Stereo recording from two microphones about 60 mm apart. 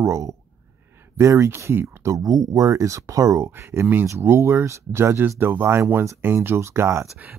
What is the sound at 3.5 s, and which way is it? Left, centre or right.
Speech, right.